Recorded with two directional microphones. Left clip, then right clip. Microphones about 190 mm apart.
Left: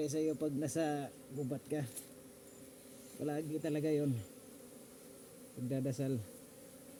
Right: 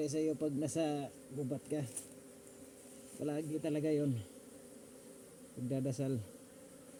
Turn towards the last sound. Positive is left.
turn(degrees=-15)  # may be behind; listen again after turning